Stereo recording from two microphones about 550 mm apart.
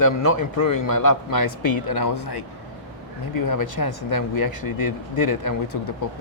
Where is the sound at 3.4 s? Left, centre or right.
Left.